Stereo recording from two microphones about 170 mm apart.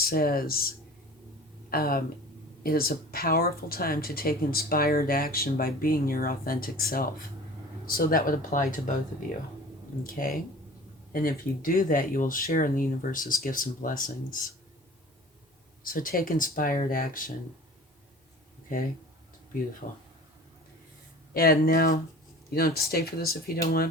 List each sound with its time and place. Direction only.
0.0 s speech: 60° left (ahead or behind)
1.7 s speech: 60° left (ahead or behind)
10.1 s speech: 55° left (ahead or behind)
15.8 s speech: 55° left (ahead or behind)
19.8 s speech: 50° left (ahead or behind)
21.3 s speech: 60° left (ahead or behind)